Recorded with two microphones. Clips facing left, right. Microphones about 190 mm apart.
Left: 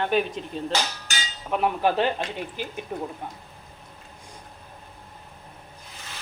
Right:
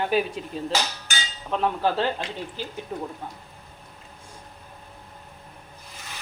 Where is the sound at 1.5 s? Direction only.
15° left (ahead or behind).